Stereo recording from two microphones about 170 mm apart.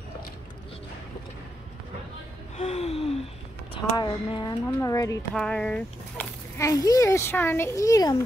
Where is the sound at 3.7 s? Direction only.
25° left (ahead or behind).